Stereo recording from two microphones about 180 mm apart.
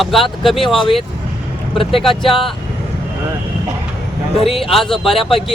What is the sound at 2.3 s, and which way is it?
Speech, 30° left (ahead or behind).